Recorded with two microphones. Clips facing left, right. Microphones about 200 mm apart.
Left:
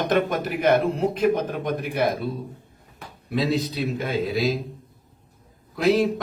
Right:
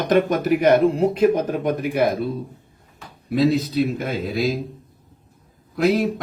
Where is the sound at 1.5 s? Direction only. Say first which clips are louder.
Right 5 dB; 50° right (ahead or behind).